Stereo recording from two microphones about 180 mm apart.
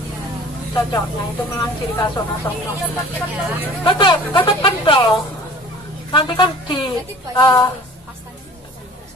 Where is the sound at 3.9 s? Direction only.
30° left (ahead or behind).